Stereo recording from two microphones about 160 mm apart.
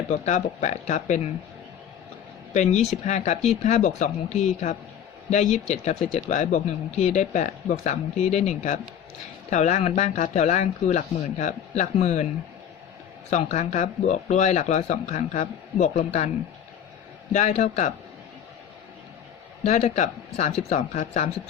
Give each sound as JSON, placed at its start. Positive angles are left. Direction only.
{"t": 0.1, "sound": "speech", "side_deg": 45}
{"t": 2.5, "sound": "speech", "side_deg": 45}
{"t": 13.3, "sound": "speech", "side_deg": 45}
{"t": 17.3, "sound": "speech", "side_deg": 50}
{"t": 19.6, "sound": "speech", "side_deg": 45}